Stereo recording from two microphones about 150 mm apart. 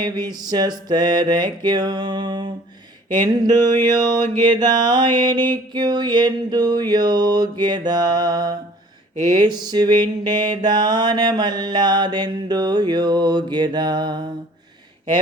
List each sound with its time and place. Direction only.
0.0 s mantra: 30° right (ahead or behind)